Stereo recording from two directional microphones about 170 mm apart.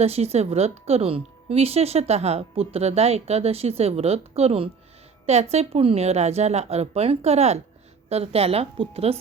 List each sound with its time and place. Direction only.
0.0 s a woman's voice: 35° right (ahead or behind)